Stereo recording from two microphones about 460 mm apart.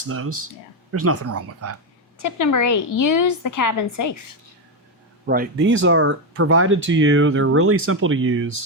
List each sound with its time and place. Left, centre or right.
0.9 s speech: right
2.2 s a woman's voice: left
5.2 s speech: centre